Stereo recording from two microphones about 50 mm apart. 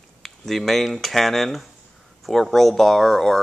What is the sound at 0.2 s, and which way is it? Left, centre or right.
Speech, centre.